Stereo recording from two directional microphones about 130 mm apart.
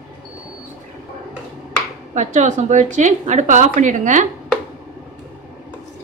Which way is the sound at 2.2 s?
70° right (ahead or behind).